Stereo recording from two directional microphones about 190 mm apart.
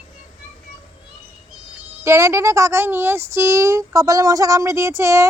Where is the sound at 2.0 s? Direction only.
15° right (ahead or behind).